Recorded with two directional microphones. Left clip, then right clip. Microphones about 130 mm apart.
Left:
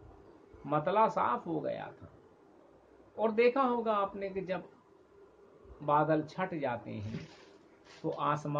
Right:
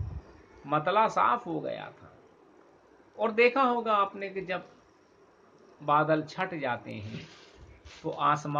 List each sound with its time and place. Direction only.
0.7 s a man's voice: 15° right (ahead or behind)
3.2 s a man's voice: 15° right (ahead or behind)
5.9 s a man's voice: 10° right (ahead or behind)
8.2 s a man's voice: 15° right (ahead or behind)